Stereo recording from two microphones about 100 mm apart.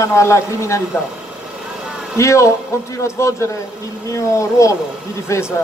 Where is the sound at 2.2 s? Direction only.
30° left (ahead or behind).